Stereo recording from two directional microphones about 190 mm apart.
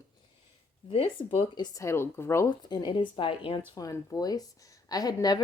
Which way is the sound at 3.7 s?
15° left (ahead or behind).